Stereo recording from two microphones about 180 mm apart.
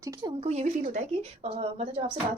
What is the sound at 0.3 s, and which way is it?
A woman's voice, 40° right (ahead or behind).